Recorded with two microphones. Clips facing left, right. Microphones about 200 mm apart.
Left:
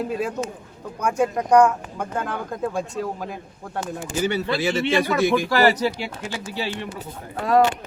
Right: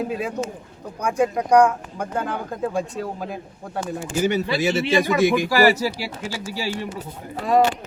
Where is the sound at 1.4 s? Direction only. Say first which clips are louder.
Even; 15° right (ahead or behind).